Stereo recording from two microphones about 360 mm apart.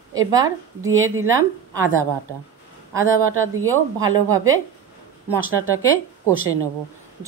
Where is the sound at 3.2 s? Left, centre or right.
Right.